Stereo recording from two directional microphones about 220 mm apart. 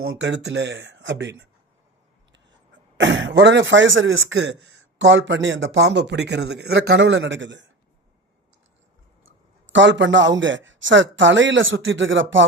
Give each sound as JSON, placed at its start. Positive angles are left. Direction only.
{"t": 0.0, "sound": "a man's voice", "side_deg": -60}
{"t": 3.0, "sound": "a man's voice", "side_deg": -55}
{"t": 9.7, "sound": "a man's voice", "side_deg": -55}